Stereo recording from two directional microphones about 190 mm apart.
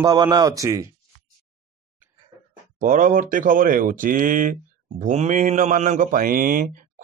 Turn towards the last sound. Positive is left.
turn(degrees=-50)  # may be behind; listen again after turning